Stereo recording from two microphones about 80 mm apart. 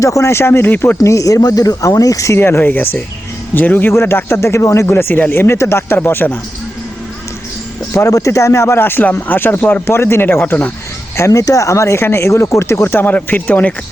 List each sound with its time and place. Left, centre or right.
0.0 s speech: left
1.0 s speech: left
7.9 s speech: left
11.2 s speech: left; by 13.7 s centre